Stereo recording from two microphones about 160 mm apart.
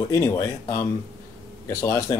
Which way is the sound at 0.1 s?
15° left (ahead or behind).